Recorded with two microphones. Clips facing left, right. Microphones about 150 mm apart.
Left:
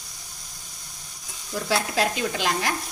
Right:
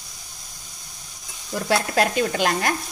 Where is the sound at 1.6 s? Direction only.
55° right (ahead or behind).